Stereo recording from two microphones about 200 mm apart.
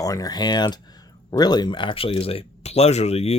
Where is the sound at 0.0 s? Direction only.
15° left (ahead or behind).